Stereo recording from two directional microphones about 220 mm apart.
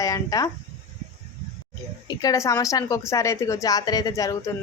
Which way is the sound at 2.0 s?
15° left (ahead or behind).